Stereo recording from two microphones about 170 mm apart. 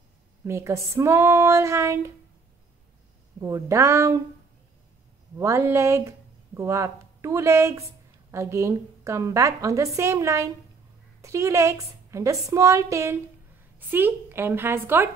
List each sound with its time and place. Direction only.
0.5 s a woman's voice: 15° right (ahead or behind)
3.3 s speech: 20° right (ahead or behind)
5.4 s a woman's voice: 15° right (ahead or behind)